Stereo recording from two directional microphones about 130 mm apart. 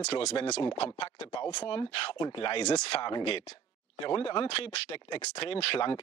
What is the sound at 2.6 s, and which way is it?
Speech, 55° left (ahead or behind).